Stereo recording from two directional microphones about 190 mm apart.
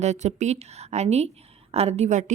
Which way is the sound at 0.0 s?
35° right (ahead or behind).